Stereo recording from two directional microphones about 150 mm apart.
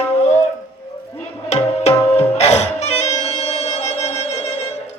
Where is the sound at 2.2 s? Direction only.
45° left (ahead or behind).